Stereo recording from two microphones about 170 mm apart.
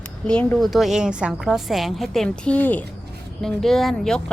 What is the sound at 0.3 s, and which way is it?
A woman's voice, 5° left (ahead or behind).